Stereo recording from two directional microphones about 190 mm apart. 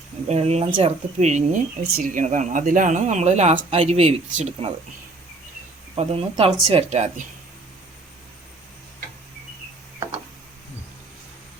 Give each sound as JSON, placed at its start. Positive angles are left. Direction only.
{"t": 0.3, "sound": "speech", "side_deg": -35}
{"t": 6.0, "sound": "speech", "side_deg": -30}